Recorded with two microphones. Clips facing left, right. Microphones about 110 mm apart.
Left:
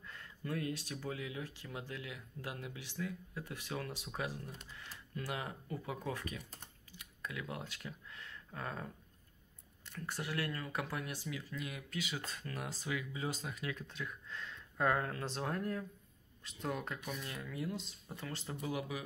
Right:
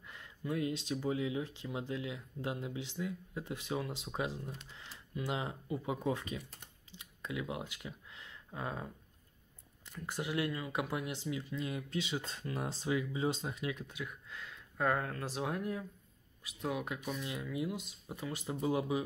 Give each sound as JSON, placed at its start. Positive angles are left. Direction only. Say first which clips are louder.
{"t": 0.0, "sound": "speech", "louder": "right 2 dB", "side_deg": -20}
{"t": 6.9, "sound": "a sound", "louder": "right 4 dB", "side_deg": -20}
{"t": 9.9, "sound": "speech", "louder": "right 4 dB", "side_deg": -15}
{"t": 18.6, "sound": "speech", "louder": "right 8 dB", "side_deg": -25}